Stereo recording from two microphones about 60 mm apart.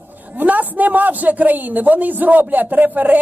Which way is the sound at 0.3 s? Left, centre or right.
Right.